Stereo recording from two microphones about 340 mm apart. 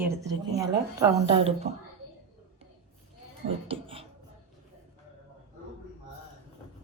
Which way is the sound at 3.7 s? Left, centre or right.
Centre.